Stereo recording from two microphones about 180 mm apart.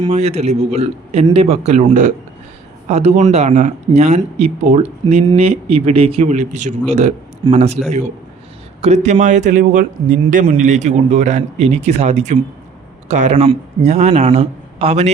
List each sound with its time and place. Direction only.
0.1 s speech: 35° right (ahead or behind)
8.8 s speech: 40° right (ahead or behind)